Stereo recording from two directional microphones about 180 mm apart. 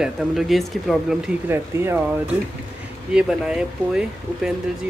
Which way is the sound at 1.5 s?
15° right (ahead or behind).